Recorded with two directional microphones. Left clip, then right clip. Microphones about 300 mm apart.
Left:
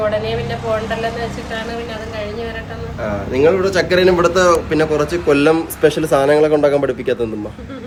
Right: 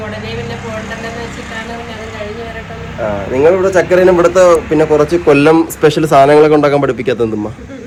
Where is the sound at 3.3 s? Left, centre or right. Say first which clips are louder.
Right 4 dB; centre; by 7.3 s right.